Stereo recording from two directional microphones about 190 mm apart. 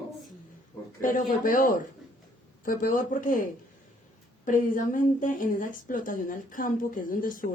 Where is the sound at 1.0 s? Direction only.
45° left (ahead or behind).